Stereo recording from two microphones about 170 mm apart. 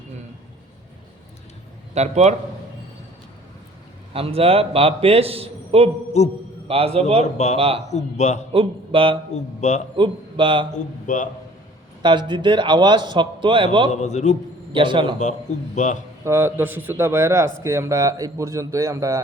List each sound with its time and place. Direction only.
2.0 s a man's voice: 40° right (ahead or behind)
4.1 s a man's voice: 35° right (ahead or behind)
6.2 s a man's voice: 40° left (ahead or behind)
6.7 s a man's voice: 35° right (ahead or behind)
7.9 s a man's voice: 45° left (ahead or behind)
8.5 s a man's voice: 30° right (ahead or behind)
9.3 s a man's voice: 45° left (ahead or behind)
10.0 s a man's voice: 30° right (ahead or behind)
10.8 s a man's voice: 50° left (ahead or behind)
12.0 s a man's voice: 25° right (ahead or behind)
13.9 s a man's voice: 40° left (ahead or behind)
14.7 s speech: 30° right (ahead or behind)
15.2 s a man's voice: 45° left (ahead or behind)
16.2 s speech: 15° right (ahead or behind)